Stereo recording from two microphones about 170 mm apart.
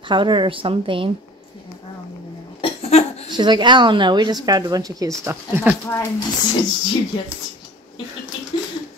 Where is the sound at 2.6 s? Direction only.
40° left (ahead or behind).